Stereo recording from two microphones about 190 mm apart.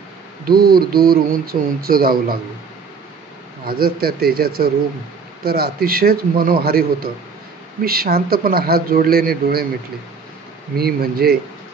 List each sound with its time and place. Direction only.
0.5 s speech: 55° right (ahead or behind)
3.6 s speech: 55° right (ahead or behind)
10.8 s speech: 55° right (ahead or behind)